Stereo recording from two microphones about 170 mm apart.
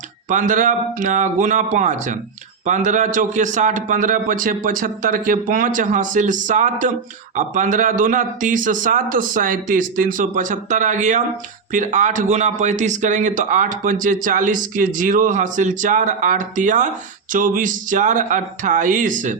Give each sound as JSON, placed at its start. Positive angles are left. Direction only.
{"t": 0.3, "sound": "speech", "side_deg": -50}